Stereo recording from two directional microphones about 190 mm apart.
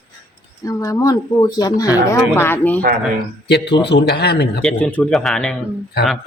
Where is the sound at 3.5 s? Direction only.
65° left (ahead or behind).